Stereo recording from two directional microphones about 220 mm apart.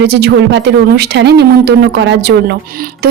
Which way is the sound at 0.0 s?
50° right (ahead or behind).